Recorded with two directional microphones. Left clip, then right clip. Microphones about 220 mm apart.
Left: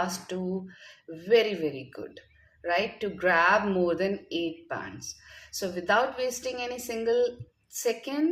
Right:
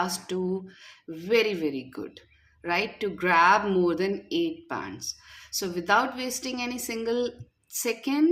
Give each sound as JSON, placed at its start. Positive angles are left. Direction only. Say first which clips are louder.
{"t": 0.0, "sound": "speech", "louder": "right 2 dB", "side_deg": -50}